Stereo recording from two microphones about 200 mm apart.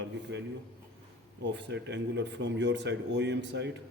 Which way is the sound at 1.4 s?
60° right (ahead or behind).